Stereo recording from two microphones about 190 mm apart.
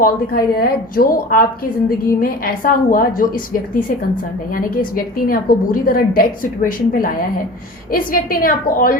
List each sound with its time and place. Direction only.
0.0 s a woman's voice: 50° left (ahead or behind)